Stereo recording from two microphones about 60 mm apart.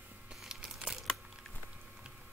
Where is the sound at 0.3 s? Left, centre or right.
Centre.